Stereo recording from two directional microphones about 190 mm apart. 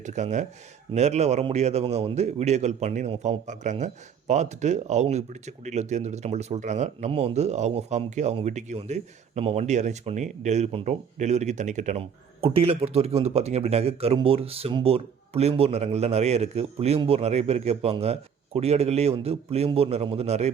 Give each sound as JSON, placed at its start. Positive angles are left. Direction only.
{"t": 0.0, "sound": "speech", "side_deg": -40}